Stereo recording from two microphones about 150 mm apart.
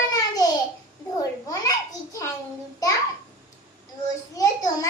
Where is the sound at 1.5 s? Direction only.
25° left (ahead or behind).